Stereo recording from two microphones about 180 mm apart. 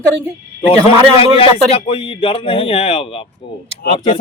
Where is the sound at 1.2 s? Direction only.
30° left (ahead or behind).